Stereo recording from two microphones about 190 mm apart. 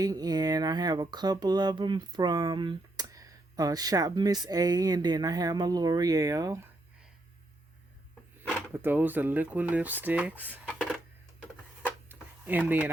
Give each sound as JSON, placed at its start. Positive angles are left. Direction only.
{"t": 0.0, "sound": "speech", "side_deg": -20}
{"t": 8.7, "sound": "speech", "side_deg": -10}
{"t": 12.5, "sound": "speech", "side_deg": -10}